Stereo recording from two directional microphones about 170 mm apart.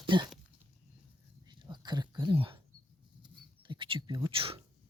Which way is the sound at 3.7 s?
30° right (ahead or behind).